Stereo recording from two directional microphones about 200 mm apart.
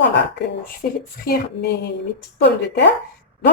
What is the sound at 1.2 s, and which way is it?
Speech, 50° left (ahead or behind).